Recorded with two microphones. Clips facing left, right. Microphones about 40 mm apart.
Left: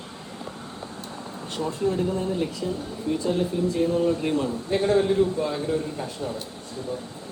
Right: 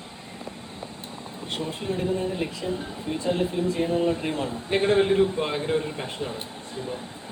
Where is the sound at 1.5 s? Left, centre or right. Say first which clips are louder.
Left 5 dB; right.